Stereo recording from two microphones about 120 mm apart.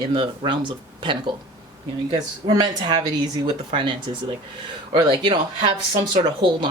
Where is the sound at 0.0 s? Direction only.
45° right (ahead or behind).